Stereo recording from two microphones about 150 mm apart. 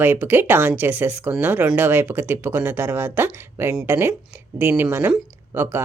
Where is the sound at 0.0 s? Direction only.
15° right (ahead or behind).